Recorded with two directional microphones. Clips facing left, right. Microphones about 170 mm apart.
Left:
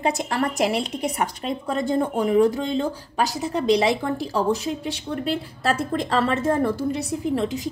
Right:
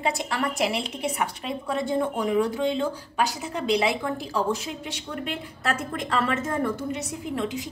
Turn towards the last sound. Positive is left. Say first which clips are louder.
# left 5 dB
turn(degrees=35)  # may be behind; listen again after turning